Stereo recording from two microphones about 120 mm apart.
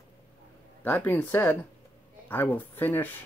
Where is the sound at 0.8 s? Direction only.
15° left (ahead or behind).